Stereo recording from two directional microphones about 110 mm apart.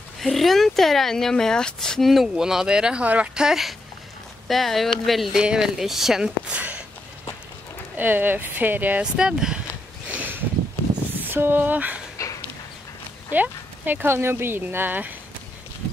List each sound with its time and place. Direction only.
0.2 s speech: centre (ahead or behind)
7.9 s speech: 15° right (ahead or behind)
10.0 s a sound: 15° right (ahead or behind)
11.1 s speech: 20° right (ahead or behind)
12.2 s a sound: 30° left (ahead or behind)
13.3 s speech: 15° right (ahead or behind)